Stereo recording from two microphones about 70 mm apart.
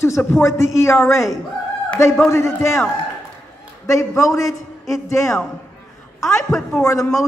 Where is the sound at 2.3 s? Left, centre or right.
Left.